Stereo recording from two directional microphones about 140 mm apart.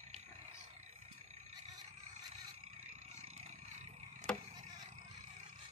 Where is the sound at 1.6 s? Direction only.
50° right (ahead or behind).